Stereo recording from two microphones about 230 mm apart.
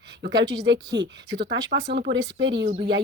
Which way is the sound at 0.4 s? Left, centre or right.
Right.